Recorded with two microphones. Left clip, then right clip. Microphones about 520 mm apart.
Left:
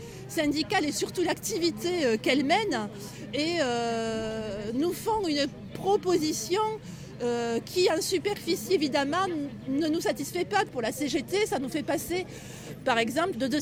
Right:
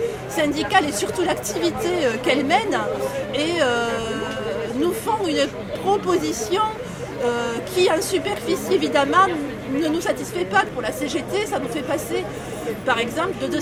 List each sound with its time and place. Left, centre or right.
0.3 s a woman's voice: left